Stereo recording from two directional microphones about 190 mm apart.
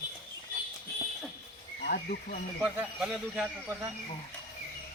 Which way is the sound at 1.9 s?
45° left (ahead or behind).